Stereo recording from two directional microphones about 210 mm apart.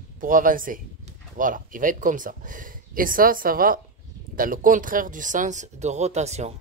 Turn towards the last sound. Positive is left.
turn(degrees=-30)  # may be behind; listen again after turning